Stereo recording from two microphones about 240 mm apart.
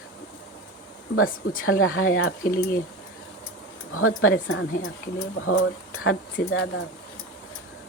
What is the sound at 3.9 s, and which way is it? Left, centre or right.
Speech, left.